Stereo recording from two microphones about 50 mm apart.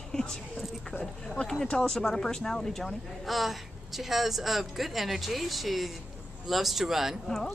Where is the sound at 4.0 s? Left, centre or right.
Centre.